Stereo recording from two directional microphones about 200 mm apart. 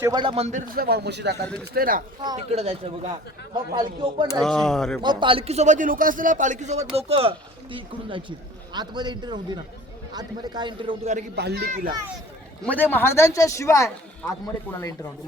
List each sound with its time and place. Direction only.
0.0 s speech: 20° right (ahead or behind); by 1.4 s 55° right (ahead or behind)
1.7 s speech: 45° right (ahead or behind)
2.3 s speech: 30° right (ahead or behind)
4.4 s speech: 5° left (ahead or behind)
5.0 s a man's voice: 25° right (ahead or behind)
11.3 s a man's voice: 55° right (ahead or behind)
12.6 s speech: 10° left (ahead or behind)